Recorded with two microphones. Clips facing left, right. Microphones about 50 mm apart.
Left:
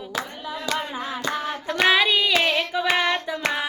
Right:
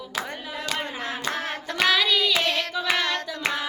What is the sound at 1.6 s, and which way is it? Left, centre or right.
Child singing, left.